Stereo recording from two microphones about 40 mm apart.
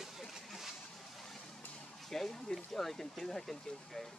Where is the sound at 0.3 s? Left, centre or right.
Centre.